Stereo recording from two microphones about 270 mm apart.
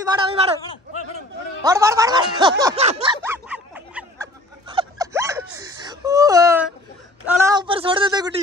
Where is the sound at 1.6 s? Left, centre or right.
Centre.